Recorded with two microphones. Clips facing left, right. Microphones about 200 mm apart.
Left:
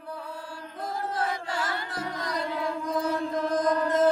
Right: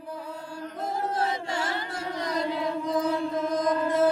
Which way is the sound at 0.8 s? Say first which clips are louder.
Right 2 dB; 25° right (ahead or behind).